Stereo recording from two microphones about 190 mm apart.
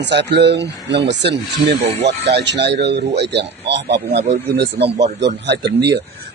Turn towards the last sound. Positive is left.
turn(degrees=-60)  # may be behind; listen again after turning